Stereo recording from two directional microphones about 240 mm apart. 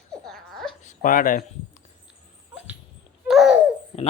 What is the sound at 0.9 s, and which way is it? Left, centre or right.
Speech, left.